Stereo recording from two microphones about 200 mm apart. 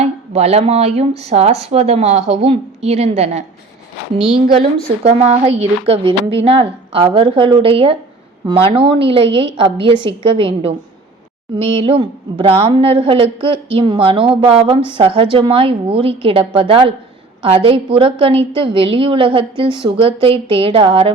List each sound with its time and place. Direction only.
0.0 s a woman's voice: 30° right (ahead or behind)
5.0 s a woman's voice: 35° right (ahead or behind)